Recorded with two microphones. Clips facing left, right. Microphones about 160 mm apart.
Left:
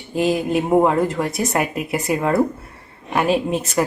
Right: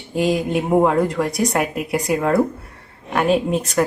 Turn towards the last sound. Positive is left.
turn(degrees=0)  # may be behind; listen again after turning